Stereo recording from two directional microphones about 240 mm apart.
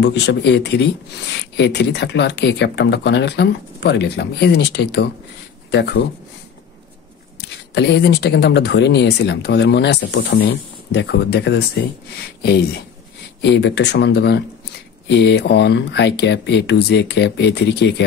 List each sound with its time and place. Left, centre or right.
0.0 s speech: left
7.7 s speech: left
13.4 s speech: left